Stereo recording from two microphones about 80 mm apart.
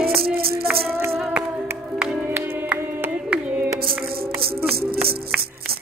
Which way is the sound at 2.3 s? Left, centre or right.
Right.